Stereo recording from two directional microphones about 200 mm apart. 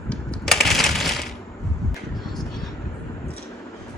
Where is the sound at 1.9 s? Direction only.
Centre (ahead or behind).